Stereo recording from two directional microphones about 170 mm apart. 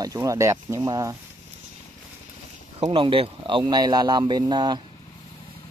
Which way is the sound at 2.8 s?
30° right (ahead or behind).